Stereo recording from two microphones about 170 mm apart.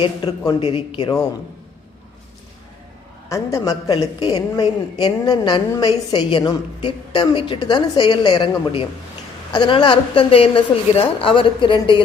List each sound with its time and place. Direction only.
0.0 s a man's voice: 25° left (ahead or behind)
3.2 s a woman's voice: 20° left (ahead or behind)